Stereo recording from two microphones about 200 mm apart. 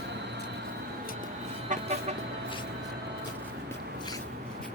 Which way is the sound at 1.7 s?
35° right (ahead or behind).